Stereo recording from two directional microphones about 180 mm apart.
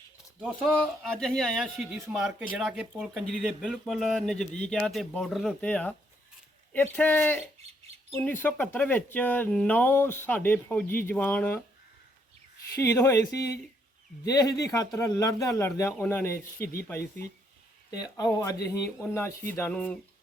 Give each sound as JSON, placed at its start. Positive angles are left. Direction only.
{"t": 0.3, "sound": "speech", "side_deg": -5}
{"t": 12.8, "sound": "speech", "side_deg": 15}
{"t": 18.2, "sound": "speech", "side_deg": 20}